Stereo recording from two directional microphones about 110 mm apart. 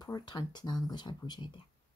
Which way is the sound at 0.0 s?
40° left (ahead or behind).